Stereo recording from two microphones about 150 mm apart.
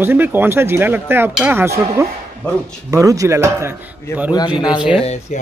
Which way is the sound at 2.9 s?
20° right (ahead or behind).